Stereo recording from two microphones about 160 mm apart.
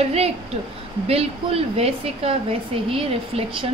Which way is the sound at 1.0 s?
40° right (ahead or behind).